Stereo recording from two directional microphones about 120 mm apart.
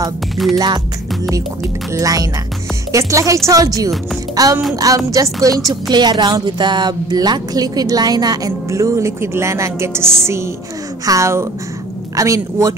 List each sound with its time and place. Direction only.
0.4 s speech: centre (ahead or behind)
1.9 s speech: 25° right (ahead or behind)